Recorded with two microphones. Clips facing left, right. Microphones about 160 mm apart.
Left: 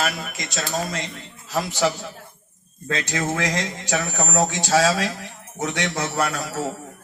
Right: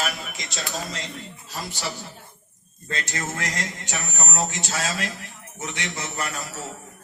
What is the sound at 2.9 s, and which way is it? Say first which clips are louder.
Speech: left 6 dB; 90° left.